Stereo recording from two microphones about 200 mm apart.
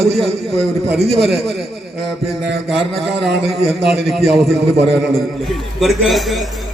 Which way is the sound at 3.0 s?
60° right (ahead or behind).